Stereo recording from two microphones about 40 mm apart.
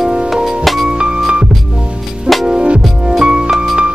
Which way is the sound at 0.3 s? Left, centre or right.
Centre.